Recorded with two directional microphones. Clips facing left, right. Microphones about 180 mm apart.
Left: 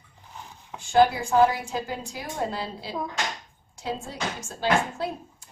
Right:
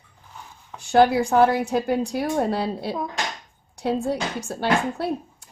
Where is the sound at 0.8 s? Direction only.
65° right (ahead or behind).